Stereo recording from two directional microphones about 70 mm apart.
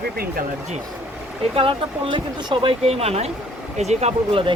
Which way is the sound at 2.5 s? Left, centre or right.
Right.